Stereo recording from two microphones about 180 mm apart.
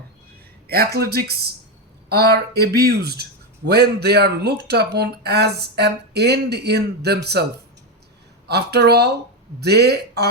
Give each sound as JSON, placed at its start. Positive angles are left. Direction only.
{"t": 0.7, "sound": "speech", "side_deg": -60}
{"t": 8.4, "sound": "speech", "side_deg": -65}